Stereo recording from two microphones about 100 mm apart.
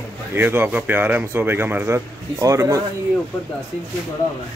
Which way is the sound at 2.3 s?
35° right (ahead or behind).